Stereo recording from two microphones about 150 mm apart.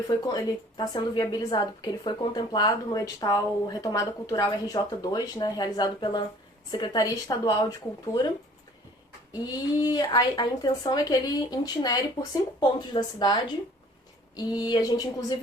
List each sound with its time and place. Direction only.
0.3 s a woman's voice: 25° left (ahead or behind)
9.4 s a woman's voice: 25° left (ahead or behind)